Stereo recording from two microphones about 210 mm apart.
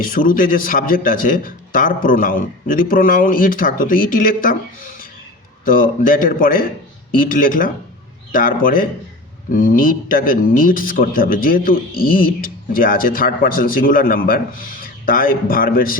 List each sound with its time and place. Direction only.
0.0 s a man's voice: 40° left (ahead or behind)